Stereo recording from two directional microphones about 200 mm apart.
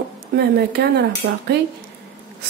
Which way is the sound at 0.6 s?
55° right (ahead or behind).